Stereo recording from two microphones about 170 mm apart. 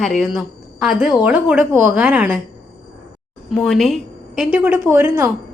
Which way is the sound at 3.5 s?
Centre (ahead or behind).